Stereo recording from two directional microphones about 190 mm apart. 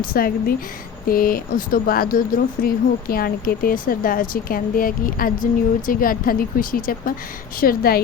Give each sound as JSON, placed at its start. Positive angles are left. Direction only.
{"t": 0.0, "sound": "speech", "side_deg": 50}